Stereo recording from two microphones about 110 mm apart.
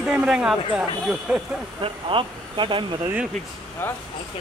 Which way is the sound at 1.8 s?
50° right (ahead or behind).